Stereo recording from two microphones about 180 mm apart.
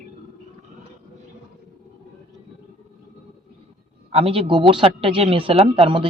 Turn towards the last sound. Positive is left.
turn(degrees=-30)  # may be behind; listen again after turning